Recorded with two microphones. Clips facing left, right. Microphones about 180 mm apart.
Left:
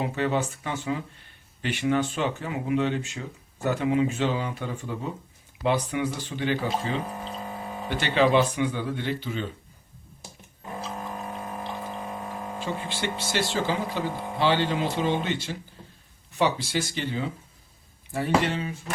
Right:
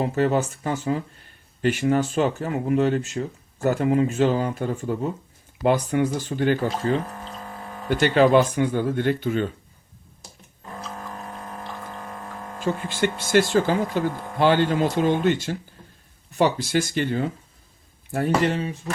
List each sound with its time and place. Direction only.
0.0 s speech: 40° right (ahead or behind)
11.9 s a sound: 10° left (ahead or behind)
12.9 s speech: 50° right (ahead or behind)